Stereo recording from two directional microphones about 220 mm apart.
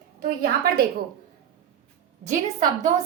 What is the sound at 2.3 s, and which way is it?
Speech, 35° right (ahead or behind).